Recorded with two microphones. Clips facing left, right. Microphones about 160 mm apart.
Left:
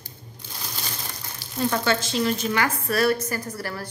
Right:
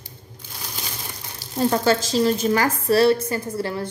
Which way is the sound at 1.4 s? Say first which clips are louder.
Right 4 dB; 35° right (ahead or behind).